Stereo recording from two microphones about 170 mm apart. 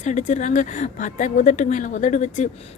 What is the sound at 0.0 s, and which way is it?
Speech, 45° left (ahead or behind).